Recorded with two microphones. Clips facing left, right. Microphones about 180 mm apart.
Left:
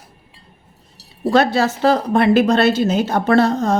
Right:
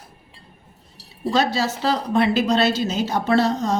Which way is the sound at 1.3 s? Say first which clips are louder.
Left 5 dB; 55° left (ahead or behind).